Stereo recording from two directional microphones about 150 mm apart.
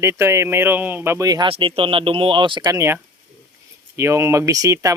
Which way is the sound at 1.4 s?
40° right (ahead or behind).